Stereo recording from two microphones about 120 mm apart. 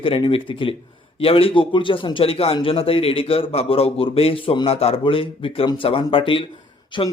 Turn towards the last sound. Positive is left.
turn(degrees=40)  # may be behind; listen again after turning